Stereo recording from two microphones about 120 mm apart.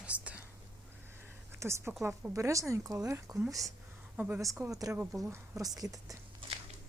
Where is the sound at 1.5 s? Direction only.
25° right (ahead or behind).